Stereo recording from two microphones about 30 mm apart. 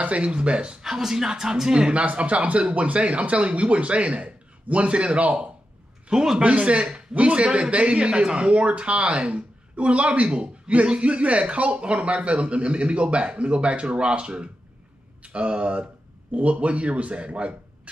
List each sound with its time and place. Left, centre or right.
0.2 s a man's voice: right
0.8 s a man's voice: centre
2.0 s speech: right
6.1 s speech: right
6.4 s a man's voice: right